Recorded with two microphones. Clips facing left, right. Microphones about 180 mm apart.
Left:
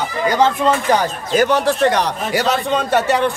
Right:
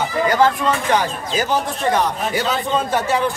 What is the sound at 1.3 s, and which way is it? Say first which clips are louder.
A man's voice: left 7 dB; 65° left (ahead or behind).